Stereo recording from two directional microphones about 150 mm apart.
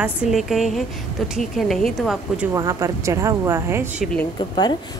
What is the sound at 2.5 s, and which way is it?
A woman's voice, 20° right (ahead or behind).